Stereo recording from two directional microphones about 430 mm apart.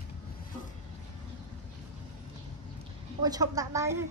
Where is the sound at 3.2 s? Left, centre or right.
Centre.